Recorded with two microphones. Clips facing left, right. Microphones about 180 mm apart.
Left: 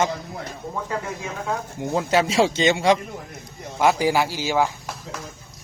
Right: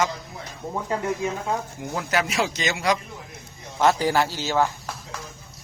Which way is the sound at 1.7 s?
25° left (ahead or behind).